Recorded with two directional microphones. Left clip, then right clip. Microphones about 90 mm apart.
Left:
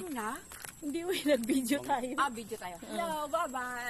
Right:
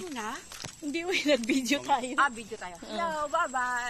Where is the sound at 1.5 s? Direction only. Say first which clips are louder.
Right 4 dB; 45° right (ahead or behind).